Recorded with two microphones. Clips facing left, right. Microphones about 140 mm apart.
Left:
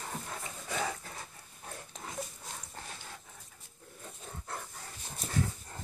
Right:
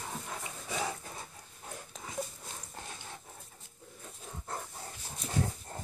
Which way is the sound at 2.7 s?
25° right (ahead or behind).